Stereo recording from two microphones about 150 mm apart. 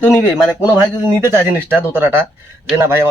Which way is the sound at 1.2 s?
15° right (ahead or behind).